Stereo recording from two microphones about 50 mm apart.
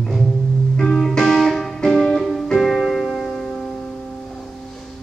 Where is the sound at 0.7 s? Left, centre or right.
Centre.